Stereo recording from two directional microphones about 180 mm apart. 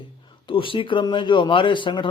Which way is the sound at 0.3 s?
30° left (ahead or behind).